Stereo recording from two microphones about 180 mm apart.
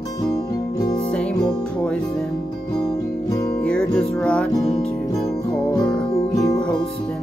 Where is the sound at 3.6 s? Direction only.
5° left (ahead or behind).